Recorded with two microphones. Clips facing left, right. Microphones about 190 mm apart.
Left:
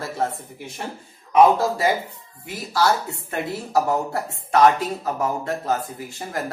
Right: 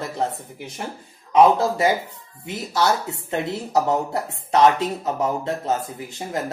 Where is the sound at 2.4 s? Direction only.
20° right (ahead or behind).